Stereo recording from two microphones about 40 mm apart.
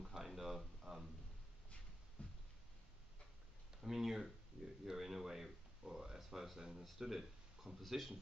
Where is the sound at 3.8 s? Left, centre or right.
Centre.